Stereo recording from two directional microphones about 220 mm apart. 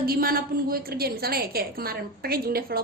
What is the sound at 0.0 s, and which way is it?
A woman's voice, 45° right (ahead or behind).